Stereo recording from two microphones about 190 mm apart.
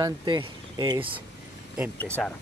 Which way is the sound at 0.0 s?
25° right (ahead or behind).